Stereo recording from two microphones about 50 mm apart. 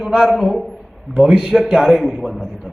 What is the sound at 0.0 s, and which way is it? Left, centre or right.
A man's voice, centre.